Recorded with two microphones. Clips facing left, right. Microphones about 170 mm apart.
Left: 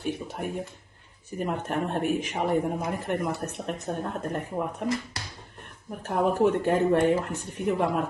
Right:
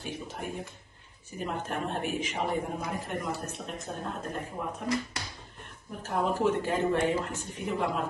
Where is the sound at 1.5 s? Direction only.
60° left (ahead or behind).